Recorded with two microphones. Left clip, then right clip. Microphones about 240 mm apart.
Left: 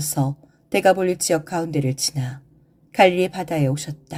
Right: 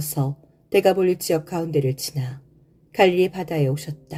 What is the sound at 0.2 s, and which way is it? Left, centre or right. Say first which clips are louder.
Speech: left 2 dB; left.